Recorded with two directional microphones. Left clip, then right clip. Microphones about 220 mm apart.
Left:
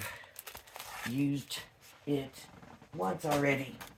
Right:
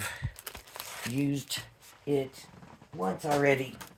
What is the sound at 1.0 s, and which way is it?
Speech, 50° right (ahead or behind).